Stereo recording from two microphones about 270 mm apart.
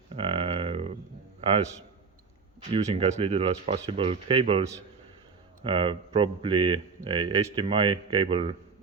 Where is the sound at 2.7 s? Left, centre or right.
Right.